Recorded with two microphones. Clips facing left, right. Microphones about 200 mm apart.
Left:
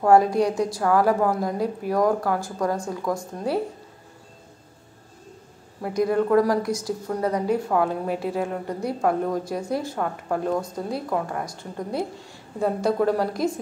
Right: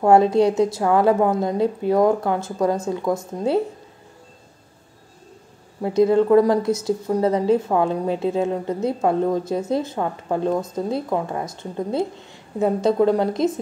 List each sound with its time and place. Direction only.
0.0 s a woman's voice: 25° right (ahead or behind)
5.8 s a woman's voice: 25° right (ahead or behind)